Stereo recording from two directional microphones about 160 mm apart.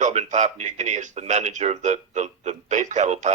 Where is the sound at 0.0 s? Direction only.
45° right (ahead or behind).